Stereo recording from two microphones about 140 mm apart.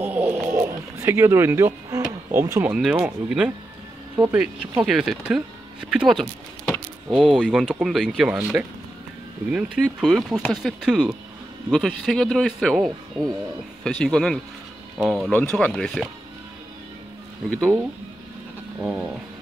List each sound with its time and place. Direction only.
0.0 s a sound: 10° right (ahead or behind)
2.7 s speech: 5° right (ahead or behind)
8.3 s speech: 10° right (ahead or behind)
17.5 s speech: 5° left (ahead or behind)
18.8 s speech: centre (ahead or behind)